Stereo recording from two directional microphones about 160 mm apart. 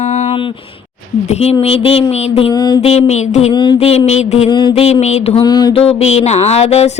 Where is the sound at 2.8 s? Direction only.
45° left (ahead or behind).